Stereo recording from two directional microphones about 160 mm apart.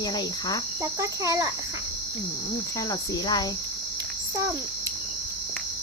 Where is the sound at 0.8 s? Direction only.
20° right (ahead or behind).